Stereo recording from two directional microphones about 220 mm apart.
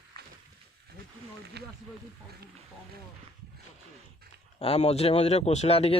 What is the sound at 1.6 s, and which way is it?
Speech, 50° right (ahead or behind).